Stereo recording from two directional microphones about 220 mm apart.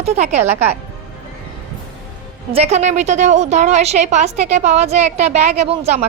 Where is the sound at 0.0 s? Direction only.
30° right (ahead or behind).